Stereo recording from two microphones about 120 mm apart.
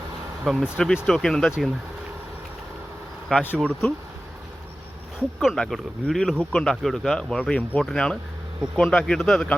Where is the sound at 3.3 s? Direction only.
15° left (ahead or behind).